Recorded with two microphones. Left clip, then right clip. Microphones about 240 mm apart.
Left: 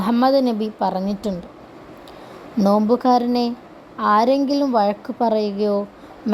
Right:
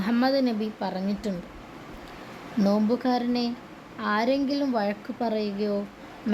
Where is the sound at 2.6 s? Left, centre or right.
Left.